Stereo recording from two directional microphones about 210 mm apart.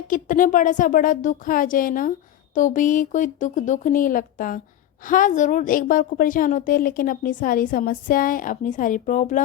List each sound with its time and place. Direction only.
0.1 s a woman's voice: 40° left (ahead or behind)